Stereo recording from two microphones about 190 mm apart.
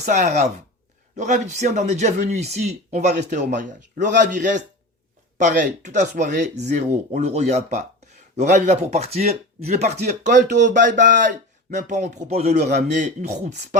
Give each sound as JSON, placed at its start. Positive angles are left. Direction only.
{"t": 0.0, "sound": "speech", "side_deg": -40}